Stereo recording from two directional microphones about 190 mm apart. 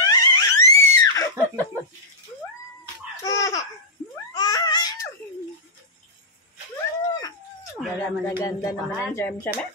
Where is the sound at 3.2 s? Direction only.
20° left (ahead or behind).